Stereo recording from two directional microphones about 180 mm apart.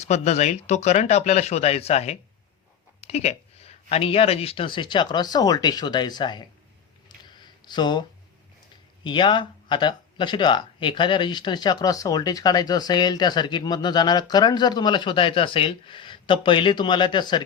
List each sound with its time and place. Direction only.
0.0 s speech: 40° left (ahead or behind)
7.3 s a sound: 25° left (ahead or behind)
9.0 s speech: 25° left (ahead or behind)